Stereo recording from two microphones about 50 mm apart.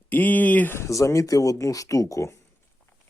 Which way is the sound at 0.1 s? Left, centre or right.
Left.